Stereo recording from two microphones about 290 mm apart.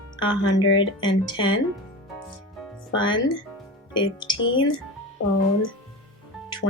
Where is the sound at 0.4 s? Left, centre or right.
Left.